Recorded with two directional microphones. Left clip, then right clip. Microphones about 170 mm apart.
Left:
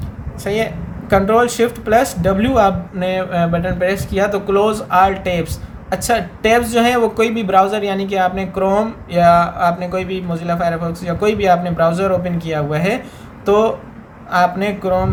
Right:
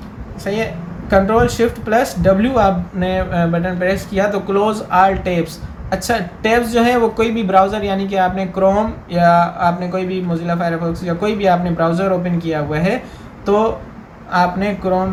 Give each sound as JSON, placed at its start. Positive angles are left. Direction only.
{"t": 0.4, "sound": "speech", "side_deg": 40}